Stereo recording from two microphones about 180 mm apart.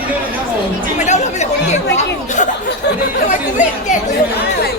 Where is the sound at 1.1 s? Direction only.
40° left (ahead or behind).